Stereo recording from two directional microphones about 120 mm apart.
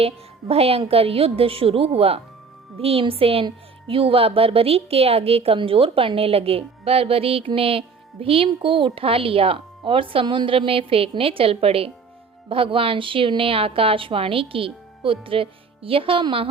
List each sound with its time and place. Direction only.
0.0 s a woman's voice: 55° right (ahead or behind)